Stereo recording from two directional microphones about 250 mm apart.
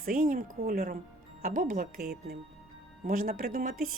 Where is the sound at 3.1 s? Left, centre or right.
Right.